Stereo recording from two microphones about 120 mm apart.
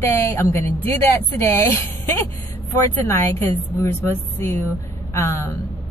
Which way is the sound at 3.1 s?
25° left (ahead or behind).